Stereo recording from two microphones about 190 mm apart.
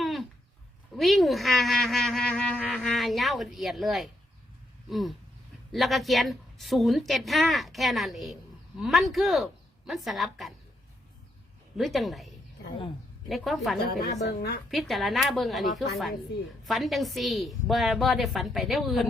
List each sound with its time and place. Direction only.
0.0 s a sound: centre (ahead or behind)
0.9 s speech: centre (ahead or behind)
11.8 s speech: centre (ahead or behind)
14.0 s a woman's voice: 60° left (ahead or behind)
14.7 s speech: centre (ahead or behind)